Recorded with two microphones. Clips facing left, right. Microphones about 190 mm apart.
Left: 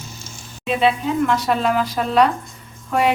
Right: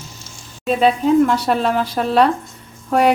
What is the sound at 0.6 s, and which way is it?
A woman's voice, 35° right (ahead or behind).